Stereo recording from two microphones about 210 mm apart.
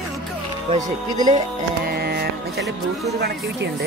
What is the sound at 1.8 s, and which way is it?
Music, 45° right (ahead or behind).